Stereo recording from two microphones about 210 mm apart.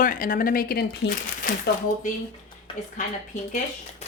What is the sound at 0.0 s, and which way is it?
Speech, 40° left (ahead or behind).